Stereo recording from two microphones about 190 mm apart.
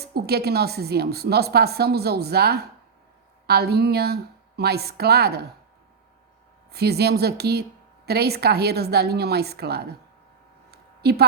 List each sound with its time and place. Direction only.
0.1 s a woman's voice: 55° right (ahead or behind)
6.7 s a woman's voice: 55° right (ahead or behind)
10.7 s a sound: 55° right (ahead or behind)